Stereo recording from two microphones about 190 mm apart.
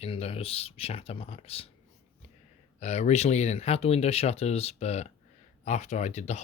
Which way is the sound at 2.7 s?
35° left (ahead or behind).